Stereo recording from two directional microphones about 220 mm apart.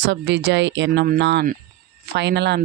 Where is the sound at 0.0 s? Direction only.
55° right (ahead or behind).